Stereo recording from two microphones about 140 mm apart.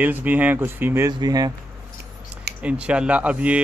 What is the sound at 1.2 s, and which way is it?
Speech, 30° right (ahead or behind).